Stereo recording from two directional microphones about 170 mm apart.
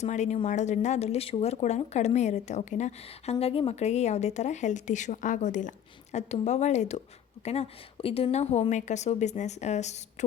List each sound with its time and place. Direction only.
0.0 s speech: 45° left (ahead or behind)